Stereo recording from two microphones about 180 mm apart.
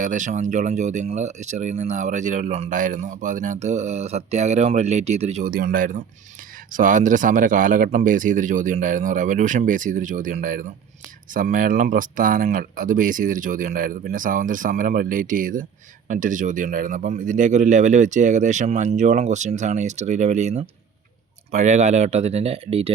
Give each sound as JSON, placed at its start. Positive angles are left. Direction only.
{"t": 0.0, "sound": "speech", "side_deg": -45}
{"t": 5.5, "sound": "speech", "side_deg": -55}